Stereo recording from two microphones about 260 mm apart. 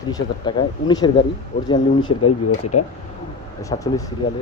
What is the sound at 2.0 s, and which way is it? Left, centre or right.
Speech, left.